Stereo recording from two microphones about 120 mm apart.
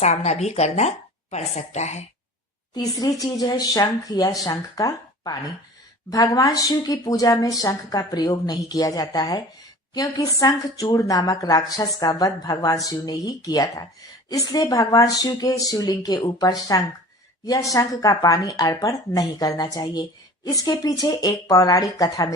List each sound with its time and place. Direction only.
0.0 s speech: 65° left (ahead or behind)
2.7 s speech: 30° left (ahead or behind)